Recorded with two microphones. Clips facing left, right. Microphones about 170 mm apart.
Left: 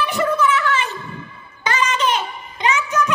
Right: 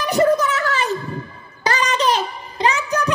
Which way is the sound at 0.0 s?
40° right (ahead or behind).